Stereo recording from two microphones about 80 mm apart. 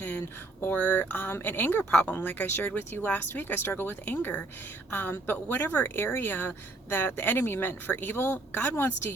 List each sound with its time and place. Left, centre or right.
0.0 s speech: left